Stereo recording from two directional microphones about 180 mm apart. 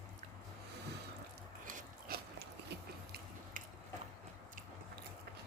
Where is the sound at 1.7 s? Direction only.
55° right (ahead or behind).